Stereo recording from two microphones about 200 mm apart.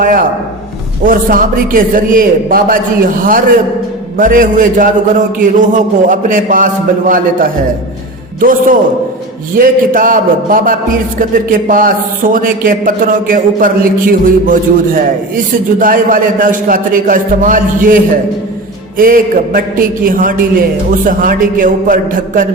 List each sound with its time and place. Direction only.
0.0 s a man's voice: 45° right (ahead or behind)
8.4 s a man's voice: 45° right (ahead or behind)